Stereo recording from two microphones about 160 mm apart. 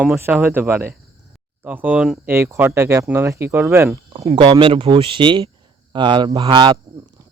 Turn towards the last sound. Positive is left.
turn(degrees=-30)  # may be behind; listen again after turning